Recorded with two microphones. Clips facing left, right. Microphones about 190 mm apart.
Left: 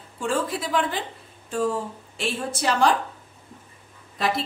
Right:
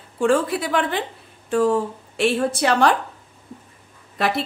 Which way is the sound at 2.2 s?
65° right (ahead or behind).